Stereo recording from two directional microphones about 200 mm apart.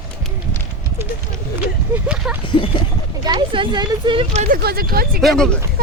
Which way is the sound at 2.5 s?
25° left (ahead or behind).